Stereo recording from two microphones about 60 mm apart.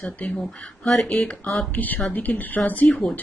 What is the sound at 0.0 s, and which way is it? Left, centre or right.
Speech, left.